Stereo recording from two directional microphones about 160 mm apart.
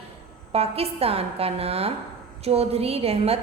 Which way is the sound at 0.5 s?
40° right (ahead or behind).